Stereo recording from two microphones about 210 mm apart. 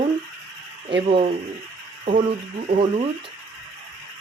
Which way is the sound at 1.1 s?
25° right (ahead or behind).